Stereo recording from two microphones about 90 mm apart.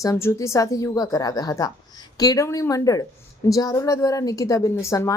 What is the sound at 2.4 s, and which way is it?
Speech, 35° left (ahead or behind).